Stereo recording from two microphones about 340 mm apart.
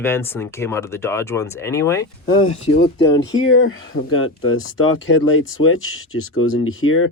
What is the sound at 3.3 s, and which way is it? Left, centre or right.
Speech, left.